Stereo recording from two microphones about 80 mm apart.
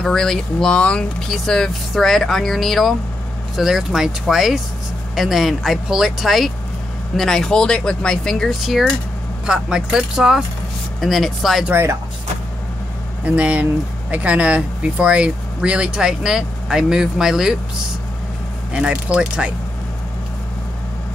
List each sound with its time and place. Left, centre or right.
0.0 s speech: centre
11.7 s speech: right
13.2 s speech: centre
18.7 s speech: centre